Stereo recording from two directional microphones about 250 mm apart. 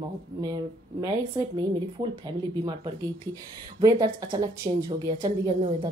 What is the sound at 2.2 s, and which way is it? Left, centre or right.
A woman's voice, centre.